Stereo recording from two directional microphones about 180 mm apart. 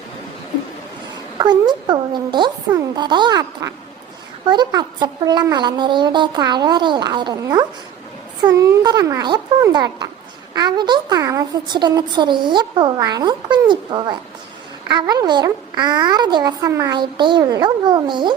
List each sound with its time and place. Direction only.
1.4 s a woman's voice: 25° right (ahead or behind)